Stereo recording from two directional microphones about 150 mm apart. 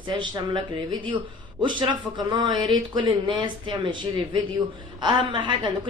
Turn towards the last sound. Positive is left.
turn(degrees=-30)  # may be behind; listen again after turning